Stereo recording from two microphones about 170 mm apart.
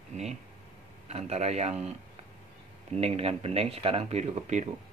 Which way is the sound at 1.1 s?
40° right (ahead or behind).